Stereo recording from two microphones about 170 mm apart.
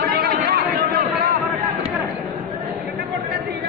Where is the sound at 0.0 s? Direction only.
65° right (ahead or behind).